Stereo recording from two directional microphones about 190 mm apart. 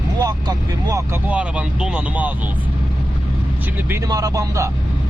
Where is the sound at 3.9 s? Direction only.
20° right (ahead or behind).